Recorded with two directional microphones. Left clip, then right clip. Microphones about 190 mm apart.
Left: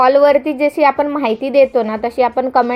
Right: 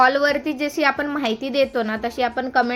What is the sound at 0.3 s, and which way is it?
Speech, 50° right (ahead or behind).